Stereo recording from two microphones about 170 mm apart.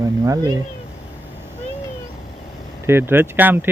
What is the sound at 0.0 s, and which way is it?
Speech, 20° right (ahead or behind).